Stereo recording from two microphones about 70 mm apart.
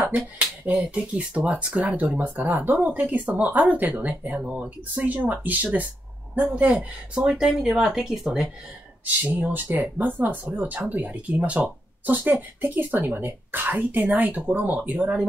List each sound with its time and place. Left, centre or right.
0.9 s speech: centre
7.3 s speech: centre
9.0 s speech: right